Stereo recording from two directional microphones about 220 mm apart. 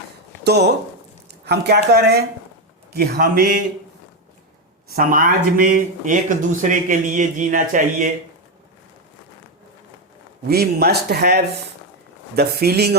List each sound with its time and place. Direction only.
0.4 s speech: 50° right (ahead or behind)
4.9 s speech: 40° right (ahead or behind)
10.5 s speech: 45° right (ahead or behind)